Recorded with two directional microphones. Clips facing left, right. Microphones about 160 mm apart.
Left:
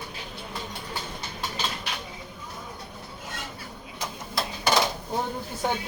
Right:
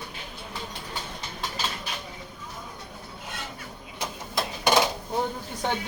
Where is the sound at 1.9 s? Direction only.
75° left (ahead or behind).